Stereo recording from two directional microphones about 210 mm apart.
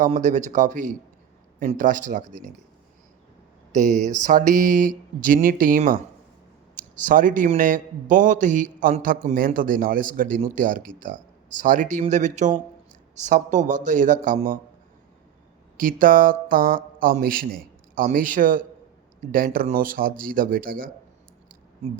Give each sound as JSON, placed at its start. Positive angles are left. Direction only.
{"t": 0.0, "sound": "speech", "side_deg": -35}
{"t": 3.8, "sound": "speech", "side_deg": 0}
{"t": 4.1, "sound": "speech", "side_deg": -40}
{"t": 15.8, "sound": "speech", "side_deg": -40}